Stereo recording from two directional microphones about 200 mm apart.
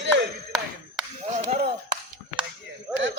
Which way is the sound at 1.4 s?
35° right (ahead or behind).